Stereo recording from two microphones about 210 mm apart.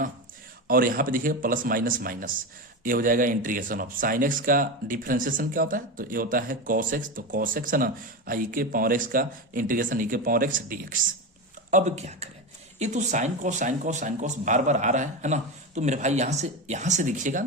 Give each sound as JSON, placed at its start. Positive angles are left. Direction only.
{"t": 0.7, "sound": "speech", "side_deg": -40}